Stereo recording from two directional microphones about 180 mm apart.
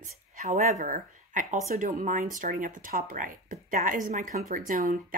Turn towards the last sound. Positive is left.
turn(degrees=-50)  # may be behind; listen again after turning